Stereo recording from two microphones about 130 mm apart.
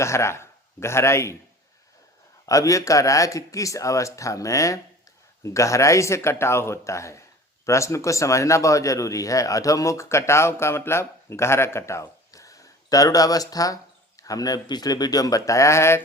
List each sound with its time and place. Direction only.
0.0 s speech: 20° left (ahead or behind)
2.5 s speech: 25° left (ahead or behind)